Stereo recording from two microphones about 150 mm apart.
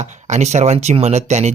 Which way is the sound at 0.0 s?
50° right (ahead or behind).